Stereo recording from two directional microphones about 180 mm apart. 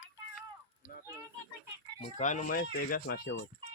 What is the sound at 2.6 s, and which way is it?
Speech, 55° left (ahead or behind).